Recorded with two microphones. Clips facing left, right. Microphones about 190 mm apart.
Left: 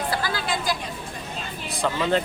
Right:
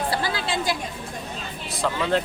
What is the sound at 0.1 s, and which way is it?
Chatter, 25° right (ahead or behind).